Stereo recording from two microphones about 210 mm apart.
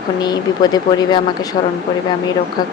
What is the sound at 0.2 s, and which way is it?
Speech, 20° left (ahead or behind).